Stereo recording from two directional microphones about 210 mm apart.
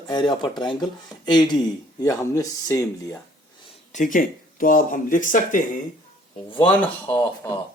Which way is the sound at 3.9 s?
40° left (ahead or behind).